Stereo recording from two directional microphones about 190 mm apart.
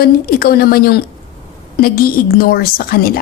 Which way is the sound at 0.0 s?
55° left (ahead or behind).